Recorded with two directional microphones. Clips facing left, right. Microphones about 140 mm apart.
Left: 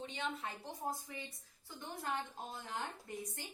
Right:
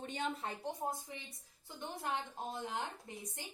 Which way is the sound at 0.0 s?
45° right (ahead or behind).